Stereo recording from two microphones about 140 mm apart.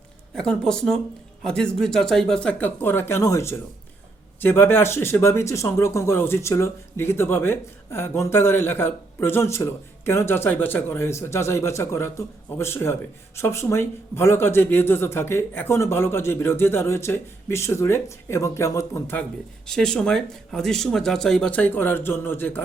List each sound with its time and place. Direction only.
0.3 s speech: 5° left (ahead or behind)
19.6 s speech: 5° left (ahead or behind)